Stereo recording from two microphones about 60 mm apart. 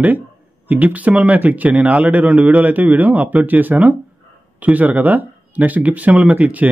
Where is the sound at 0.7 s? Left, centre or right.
Right.